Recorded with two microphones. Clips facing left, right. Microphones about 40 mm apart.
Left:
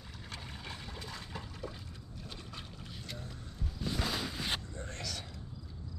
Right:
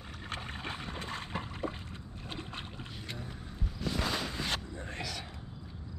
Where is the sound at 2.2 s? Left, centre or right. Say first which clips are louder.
Right 6 dB; right.